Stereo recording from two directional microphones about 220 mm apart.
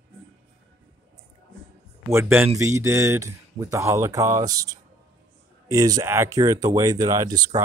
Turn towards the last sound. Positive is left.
turn(degrees=-15)  # may be behind; listen again after turning